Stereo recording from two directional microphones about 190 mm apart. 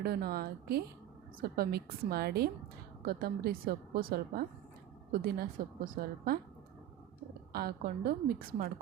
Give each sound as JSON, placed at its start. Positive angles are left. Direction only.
{"t": 0.0, "sound": "a woman's voice", "side_deg": -55}
{"t": 7.5, "sound": "a woman's voice", "side_deg": -55}